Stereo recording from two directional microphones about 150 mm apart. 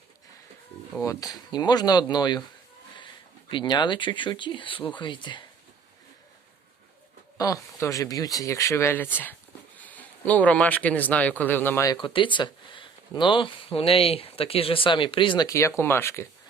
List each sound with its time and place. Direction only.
1.0 s speech: 25° left (ahead or behind)
3.5 s speech: 30° left (ahead or behind)
7.3 s speech: 20° left (ahead or behind)
12.0 s speech: 35° left (ahead or behind); by 16.3 s 20° left (ahead or behind)